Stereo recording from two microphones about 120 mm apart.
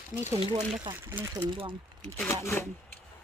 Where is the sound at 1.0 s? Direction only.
20° right (ahead or behind).